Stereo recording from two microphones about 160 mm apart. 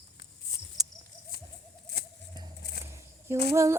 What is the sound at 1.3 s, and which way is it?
Owl, 70° left (ahead or behind).